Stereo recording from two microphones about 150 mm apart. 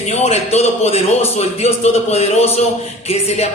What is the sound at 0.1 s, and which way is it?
A man's voice, 45° left (ahead or behind).